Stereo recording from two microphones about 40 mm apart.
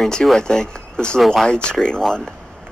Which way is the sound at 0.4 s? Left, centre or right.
Centre.